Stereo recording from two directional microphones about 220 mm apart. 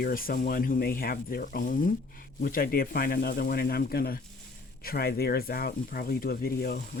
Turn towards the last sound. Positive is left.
turn(degrees=45)  # may be behind; listen again after turning